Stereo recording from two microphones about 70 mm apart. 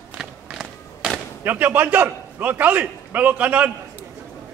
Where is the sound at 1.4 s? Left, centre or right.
Right.